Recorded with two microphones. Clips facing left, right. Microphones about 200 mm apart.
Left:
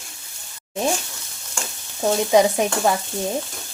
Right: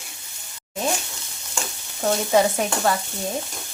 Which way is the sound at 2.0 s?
15° left (ahead or behind).